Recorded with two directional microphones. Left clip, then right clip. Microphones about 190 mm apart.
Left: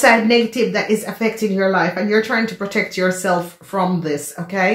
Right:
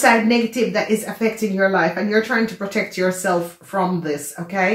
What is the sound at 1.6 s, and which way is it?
Speech, 45° left (ahead or behind).